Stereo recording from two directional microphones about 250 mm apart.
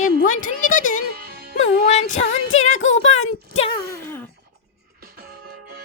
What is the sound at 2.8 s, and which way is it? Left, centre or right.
Speech, left.